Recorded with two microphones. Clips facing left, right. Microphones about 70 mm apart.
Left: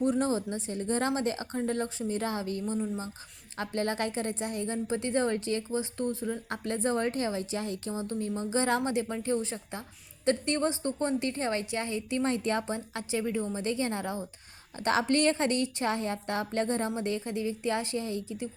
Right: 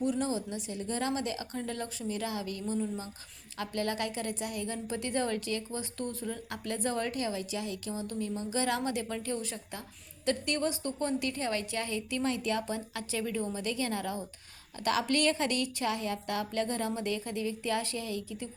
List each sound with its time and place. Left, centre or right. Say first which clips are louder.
0.0 s a woman's voice: left 4 dB; left
2.7 s a woman's voice: right 2 dB; centre
3.6 s a woman's voice: left 2 dB; left